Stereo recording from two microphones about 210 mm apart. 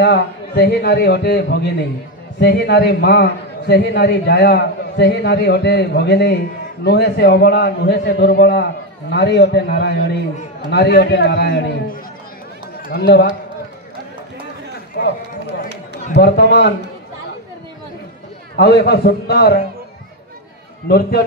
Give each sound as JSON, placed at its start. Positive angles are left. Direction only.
{"t": 0.0, "sound": "a man's voice", "side_deg": 50}
{"t": 15.0, "sound": "a man's voice", "side_deg": 45}
{"t": 18.6, "sound": "a man's voice", "side_deg": 50}